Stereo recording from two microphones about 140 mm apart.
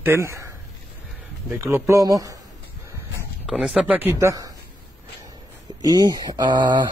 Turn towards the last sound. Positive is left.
turn(degrees=-30)  # may be behind; listen again after turning